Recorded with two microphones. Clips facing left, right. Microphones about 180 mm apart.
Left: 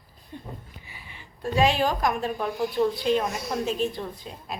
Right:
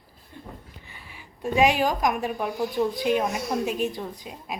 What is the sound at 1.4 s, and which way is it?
A woman's voice, 15° right (ahead or behind).